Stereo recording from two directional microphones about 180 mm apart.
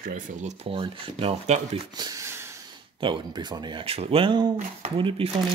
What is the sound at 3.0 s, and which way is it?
Speech, 25° right (ahead or behind).